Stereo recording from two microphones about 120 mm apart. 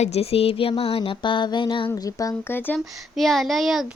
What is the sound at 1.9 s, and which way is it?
Speech, 30° left (ahead or behind).